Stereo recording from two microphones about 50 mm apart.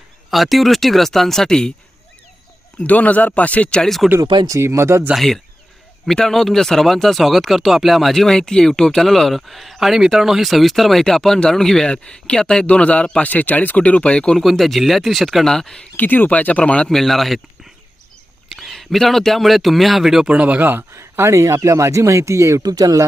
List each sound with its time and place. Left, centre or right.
0.3 s speech: centre
2.8 s speech: left
3.8 s speech: centre
4.5 s speech: right
5.1 s speech: centre
12.6 s speech: left
14.3 s speech: centre
15.4 s speech: centre
16.0 s speech: left
16.9 s speech: centre
18.5 s speech: centre
20.2 s speech: right
20.9 s speech: right